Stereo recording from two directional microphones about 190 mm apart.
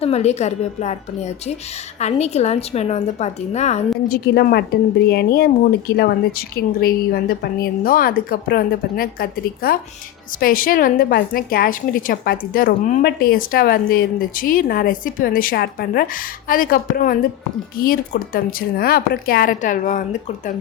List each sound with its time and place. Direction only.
0.0 s a woman's voice: 35° left (ahead or behind)
4.1 s a woman's voice: 55° left (ahead or behind)